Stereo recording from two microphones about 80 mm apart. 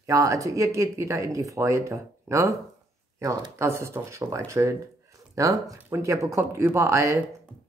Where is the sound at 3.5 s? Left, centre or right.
Right.